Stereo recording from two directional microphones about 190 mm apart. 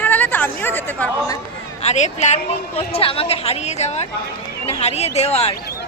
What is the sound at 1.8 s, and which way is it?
A woman's voice, 35° left (ahead or behind).